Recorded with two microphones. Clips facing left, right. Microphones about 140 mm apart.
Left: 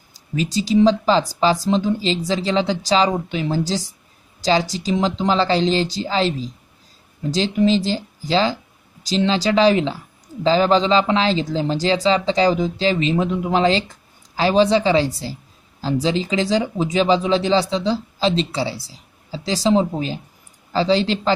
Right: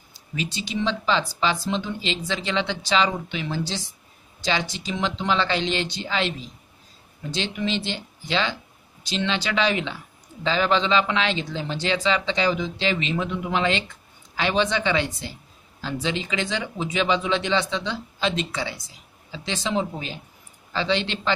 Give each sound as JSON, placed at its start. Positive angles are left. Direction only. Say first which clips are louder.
{"t": 0.1, "sound": "speech", "louder": "left 8 dB", "side_deg": 40}